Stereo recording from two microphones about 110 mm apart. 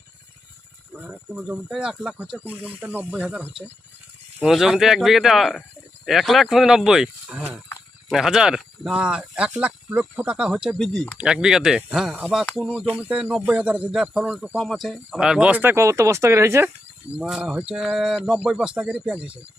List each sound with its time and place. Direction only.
0.9 s speech: 10° right (ahead or behind)
17.2 s speech: 5° right (ahead or behind)